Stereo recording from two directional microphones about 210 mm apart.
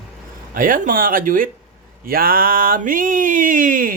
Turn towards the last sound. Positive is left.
turn(degrees=-40)  # may be behind; listen again after turning